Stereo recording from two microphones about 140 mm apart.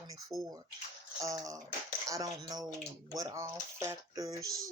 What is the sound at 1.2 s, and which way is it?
Speech, 25° right (ahead or behind).